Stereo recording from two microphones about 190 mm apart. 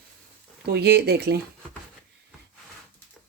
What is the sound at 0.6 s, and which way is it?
Speech, 60° right (ahead or behind).